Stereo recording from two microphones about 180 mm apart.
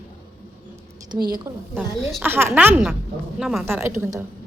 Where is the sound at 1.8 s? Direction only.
10° right (ahead or behind).